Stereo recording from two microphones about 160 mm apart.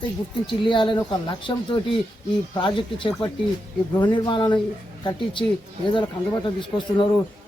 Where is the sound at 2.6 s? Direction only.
30° left (ahead or behind).